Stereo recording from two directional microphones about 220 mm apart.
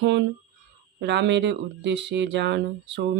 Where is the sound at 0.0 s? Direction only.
50° right (ahead or behind).